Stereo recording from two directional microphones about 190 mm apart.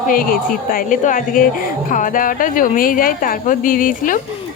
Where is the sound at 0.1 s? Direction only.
50° left (ahead or behind).